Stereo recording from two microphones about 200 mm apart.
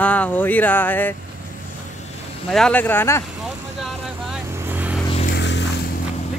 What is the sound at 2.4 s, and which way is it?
Speech, 5° left (ahead or behind).